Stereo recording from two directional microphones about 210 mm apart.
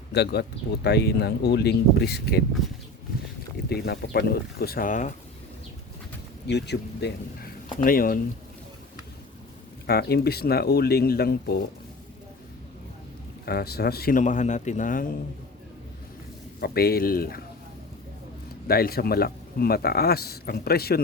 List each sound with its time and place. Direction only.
0.1 s a man's voice: 50° left (ahead or behind)
3.7 s a man's voice: 50° left (ahead or behind)
6.5 s a man's voice: 55° left (ahead or behind)
7.8 s a man's voice: 40° left (ahead or behind)
9.8 s a man's voice: 50° left (ahead or behind)
13.4 s speech: 50° left (ahead or behind)
16.6 s a man's voice: 45° left (ahead or behind)
18.7 s a man's voice: 45° left (ahead or behind)